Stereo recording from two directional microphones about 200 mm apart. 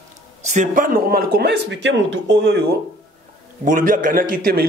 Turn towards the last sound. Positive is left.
turn(degrees=-45)  # may be behind; listen again after turning